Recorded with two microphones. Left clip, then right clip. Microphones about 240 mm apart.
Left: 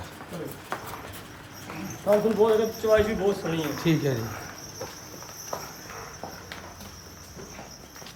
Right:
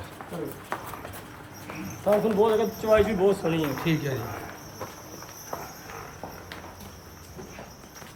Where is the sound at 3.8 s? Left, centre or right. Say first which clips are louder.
Left 3 dB; centre.